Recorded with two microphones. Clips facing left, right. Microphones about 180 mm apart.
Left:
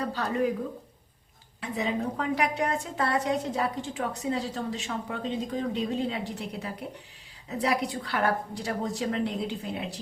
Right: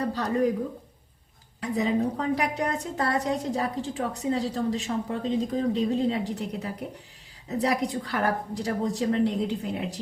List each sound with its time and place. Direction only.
0.0 s a woman's voice: 35° right (ahead or behind)
1.6 s a woman's voice: 40° right (ahead or behind)